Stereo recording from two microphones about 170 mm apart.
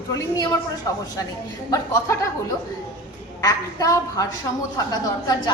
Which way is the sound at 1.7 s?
20° left (ahead or behind).